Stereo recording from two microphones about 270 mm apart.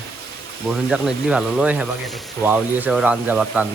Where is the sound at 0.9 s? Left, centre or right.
Centre.